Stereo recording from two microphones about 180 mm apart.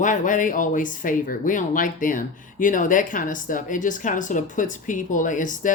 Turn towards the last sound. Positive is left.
turn(degrees=45)  # may be behind; listen again after turning